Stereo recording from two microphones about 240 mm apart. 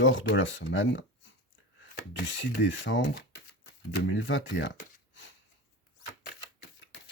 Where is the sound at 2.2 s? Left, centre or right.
Left.